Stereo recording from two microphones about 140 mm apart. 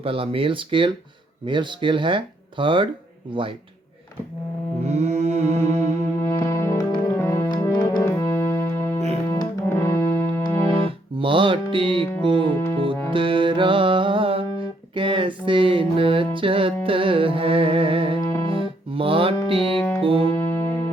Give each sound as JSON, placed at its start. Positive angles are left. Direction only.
{"t": 0.0, "sound": "speech", "side_deg": -40}
{"t": 4.9, "sound": "mantra", "side_deg": -55}
{"t": 6.1, "sound": "music", "side_deg": 15}
{"t": 8.0, "sound": "keyboard", "side_deg": 15}
{"t": 9.3, "sound": "music", "side_deg": 20}
{"t": 10.8, "sound": "music", "side_deg": -35}
{"t": 12.2, "sound": "speech", "side_deg": -40}
{"t": 12.7, "sound": "music", "side_deg": -40}
{"t": 14.9, "sound": "a sound", "side_deg": -35}
{"t": 16.3, "sound": "music", "side_deg": -40}
{"t": 18.3, "sound": "music", "side_deg": 20}
{"t": 18.5, "sound": "music", "side_deg": -40}
{"t": 20.3, "sound": "music", "side_deg": 15}